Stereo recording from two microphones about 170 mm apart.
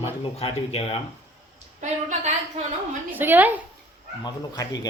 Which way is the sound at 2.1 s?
45° right (ahead or behind).